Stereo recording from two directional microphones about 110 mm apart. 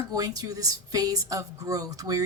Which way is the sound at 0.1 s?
35° right (ahead or behind).